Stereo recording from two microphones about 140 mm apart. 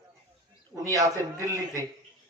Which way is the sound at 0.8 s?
20° right (ahead or behind).